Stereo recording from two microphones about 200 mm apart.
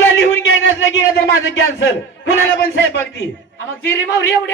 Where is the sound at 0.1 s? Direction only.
70° left (ahead or behind).